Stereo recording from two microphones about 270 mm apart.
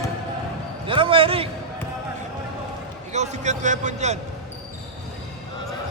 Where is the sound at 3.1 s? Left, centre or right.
Right.